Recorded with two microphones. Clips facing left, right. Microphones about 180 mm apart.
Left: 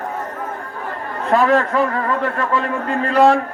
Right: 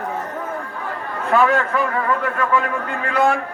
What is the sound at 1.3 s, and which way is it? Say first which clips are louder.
A man's voice: left 2 dB; 35° left (ahead or behind).